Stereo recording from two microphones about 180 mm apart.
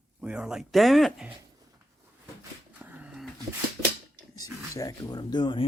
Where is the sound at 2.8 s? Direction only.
10° right (ahead or behind).